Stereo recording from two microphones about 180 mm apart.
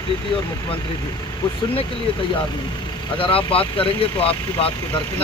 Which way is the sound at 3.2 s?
30° left (ahead or behind).